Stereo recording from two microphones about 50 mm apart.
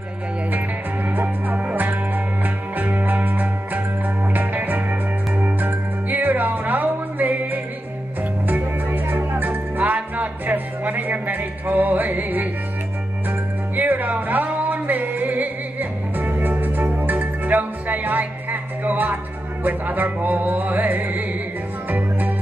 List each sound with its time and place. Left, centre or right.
1.0 s music: right
13.7 s music: right